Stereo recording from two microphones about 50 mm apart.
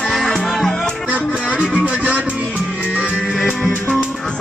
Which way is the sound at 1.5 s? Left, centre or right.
Right.